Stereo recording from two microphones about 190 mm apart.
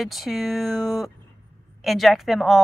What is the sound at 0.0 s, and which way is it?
Speech, centre (ahead or behind).